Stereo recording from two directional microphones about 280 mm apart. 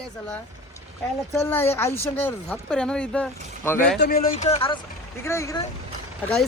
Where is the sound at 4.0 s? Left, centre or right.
Left.